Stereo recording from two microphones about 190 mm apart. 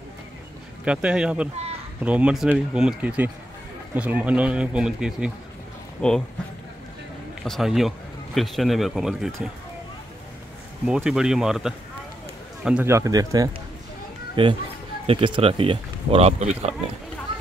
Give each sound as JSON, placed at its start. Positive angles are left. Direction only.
{"t": 0.8, "sound": "speech", "side_deg": -5}
{"t": 7.4, "sound": "speech", "side_deg": 0}
{"t": 10.9, "sound": "speech", "side_deg": -5}